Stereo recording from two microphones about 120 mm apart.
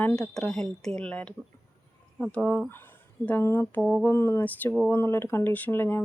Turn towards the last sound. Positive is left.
turn(degrees=20)  # may be behind; listen again after turning